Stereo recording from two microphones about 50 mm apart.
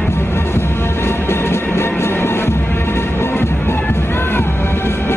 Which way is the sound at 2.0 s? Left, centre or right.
Left.